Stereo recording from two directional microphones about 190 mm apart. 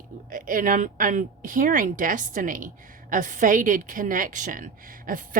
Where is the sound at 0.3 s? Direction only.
45° right (ahead or behind).